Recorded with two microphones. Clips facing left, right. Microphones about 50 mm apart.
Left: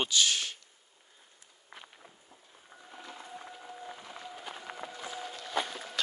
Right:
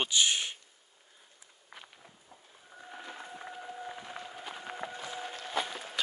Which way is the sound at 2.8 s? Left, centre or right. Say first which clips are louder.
Right 3 dB; right.